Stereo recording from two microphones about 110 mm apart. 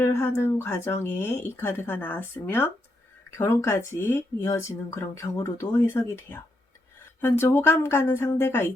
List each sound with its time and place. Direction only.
0.0 s speech: 25° left (ahead or behind)